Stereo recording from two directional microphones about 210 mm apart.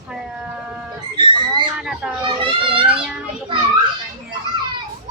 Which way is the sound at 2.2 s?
25° right (ahead or behind).